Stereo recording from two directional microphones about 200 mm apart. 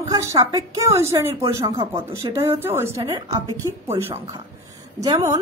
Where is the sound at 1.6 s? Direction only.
25° right (ahead or behind).